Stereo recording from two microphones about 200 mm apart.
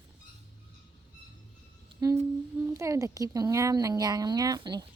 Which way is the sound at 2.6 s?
15° right (ahead or behind).